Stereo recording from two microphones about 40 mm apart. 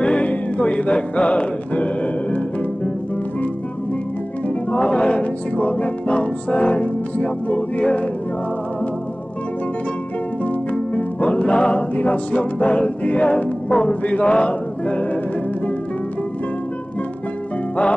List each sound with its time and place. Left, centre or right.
0.0 s music: left
4.7 s music: left
10.4 s music: left